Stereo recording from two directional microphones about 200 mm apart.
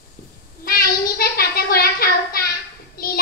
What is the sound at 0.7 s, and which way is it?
Child singing, 45° left (ahead or behind).